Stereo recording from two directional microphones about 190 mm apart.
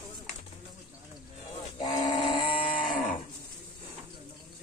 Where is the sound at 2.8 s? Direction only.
45° left (ahead or behind).